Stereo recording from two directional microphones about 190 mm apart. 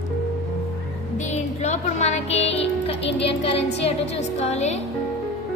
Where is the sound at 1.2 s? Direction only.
35° left (ahead or behind).